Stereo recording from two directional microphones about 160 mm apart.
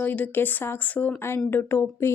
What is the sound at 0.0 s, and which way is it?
A woman's voice, 10° left (ahead or behind).